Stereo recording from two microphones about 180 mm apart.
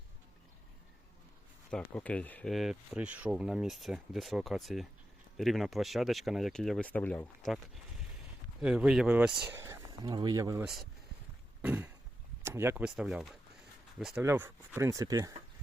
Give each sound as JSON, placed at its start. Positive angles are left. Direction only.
{"t": 1.7, "sound": "speech", "side_deg": 5}
{"t": 8.6, "sound": "speech", "side_deg": -5}
{"t": 9.5, "sound": "speech", "side_deg": -15}
{"t": 11.6, "sound": "cough", "side_deg": -10}
{"t": 12.4, "sound": "speech", "side_deg": -15}